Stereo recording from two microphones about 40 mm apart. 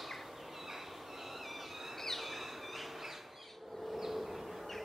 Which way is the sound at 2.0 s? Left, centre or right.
Centre.